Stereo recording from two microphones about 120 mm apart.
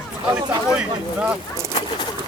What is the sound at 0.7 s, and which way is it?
Speech, 10° right (ahead or behind).